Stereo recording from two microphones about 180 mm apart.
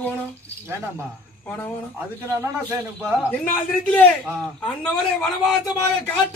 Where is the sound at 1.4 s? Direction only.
10° left (ahead or behind).